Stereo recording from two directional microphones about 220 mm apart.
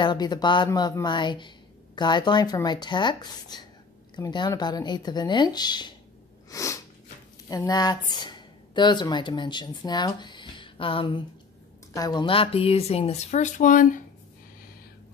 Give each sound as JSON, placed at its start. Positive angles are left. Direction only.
{"t": 0.0, "sound": "speech", "side_deg": 20}
{"t": 6.5, "sound": "sneeze", "side_deg": 15}
{"t": 7.4, "sound": "speech", "side_deg": 15}